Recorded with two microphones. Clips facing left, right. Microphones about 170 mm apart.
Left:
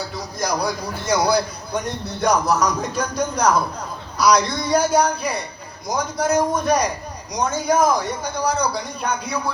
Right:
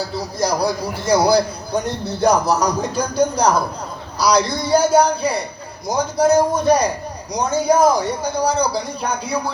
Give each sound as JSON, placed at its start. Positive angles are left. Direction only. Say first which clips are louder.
{"t": 0.3, "sound": "speech", "louder": "right 4 dB", "side_deg": -30}